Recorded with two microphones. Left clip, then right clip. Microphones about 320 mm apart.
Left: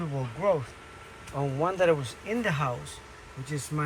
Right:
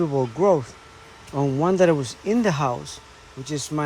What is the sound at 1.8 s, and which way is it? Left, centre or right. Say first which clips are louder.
Speech: right 3 dB; centre.